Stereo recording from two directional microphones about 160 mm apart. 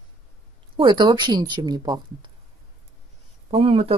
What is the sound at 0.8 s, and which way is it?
Speech, 30° right (ahead or behind).